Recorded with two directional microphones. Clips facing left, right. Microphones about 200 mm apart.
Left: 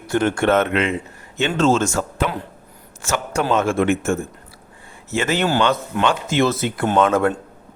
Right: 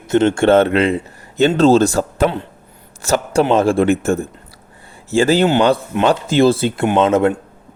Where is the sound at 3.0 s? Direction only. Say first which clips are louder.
Right 7 dB; 35° right (ahead or behind).